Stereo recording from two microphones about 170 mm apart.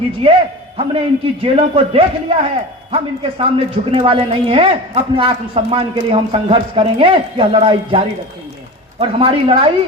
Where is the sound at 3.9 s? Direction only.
30° right (ahead or behind).